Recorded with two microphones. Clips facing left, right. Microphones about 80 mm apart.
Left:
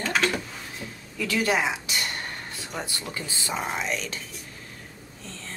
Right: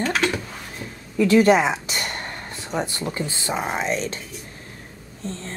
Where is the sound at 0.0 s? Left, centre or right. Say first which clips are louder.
Right 3 dB; centre.